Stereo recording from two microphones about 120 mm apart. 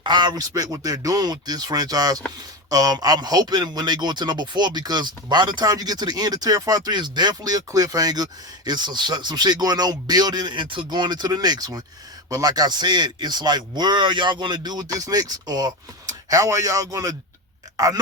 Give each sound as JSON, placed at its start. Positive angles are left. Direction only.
{"t": 0.0, "sound": "a man's voice", "side_deg": -40}